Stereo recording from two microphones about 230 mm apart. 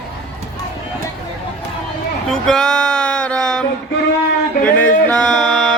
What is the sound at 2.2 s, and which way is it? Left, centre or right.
Speech, centre.